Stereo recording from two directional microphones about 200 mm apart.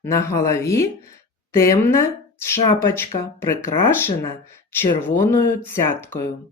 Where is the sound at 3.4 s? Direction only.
15° left (ahead or behind).